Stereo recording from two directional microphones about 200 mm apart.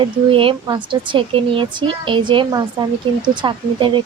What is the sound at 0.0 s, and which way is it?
Speech, 25° right (ahead or behind).